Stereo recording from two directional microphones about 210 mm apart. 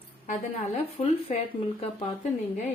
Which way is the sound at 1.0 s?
30° left (ahead or behind).